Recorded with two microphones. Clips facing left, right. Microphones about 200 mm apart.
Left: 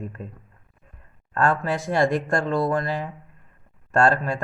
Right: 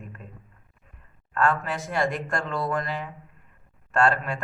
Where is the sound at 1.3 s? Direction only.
35° left (ahead or behind).